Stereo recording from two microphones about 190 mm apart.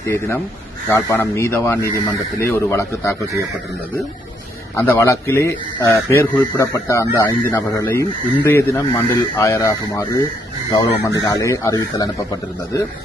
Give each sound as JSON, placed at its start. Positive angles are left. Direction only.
{"t": 0.0, "sound": "a man's voice", "side_deg": 15}
{"t": 4.7, "sound": "a man's voice", "side_deg": 15}